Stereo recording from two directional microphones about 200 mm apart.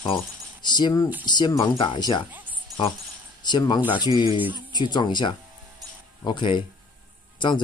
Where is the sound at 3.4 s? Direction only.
20° left (ahead or behind).